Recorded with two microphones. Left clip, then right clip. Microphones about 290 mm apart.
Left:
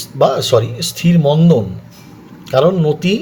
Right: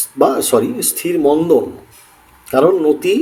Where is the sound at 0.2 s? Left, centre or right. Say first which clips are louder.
Left 1 dB; left.